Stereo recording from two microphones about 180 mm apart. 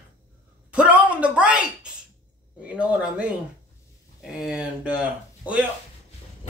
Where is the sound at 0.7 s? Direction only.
5° right (ahead or behind).